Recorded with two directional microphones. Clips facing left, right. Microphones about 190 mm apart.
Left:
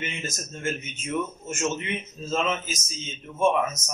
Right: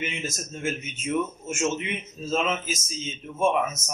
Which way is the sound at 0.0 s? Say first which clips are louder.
Right 2 dB; 5° right (ahead or behind).